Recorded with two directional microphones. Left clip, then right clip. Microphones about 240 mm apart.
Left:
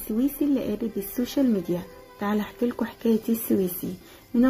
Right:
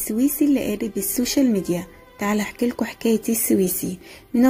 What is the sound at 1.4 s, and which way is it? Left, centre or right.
Speech, right.